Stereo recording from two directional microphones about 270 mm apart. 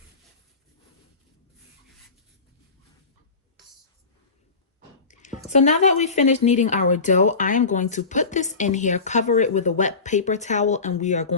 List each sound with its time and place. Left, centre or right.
5.0 s squish: left
5.5 s speech: left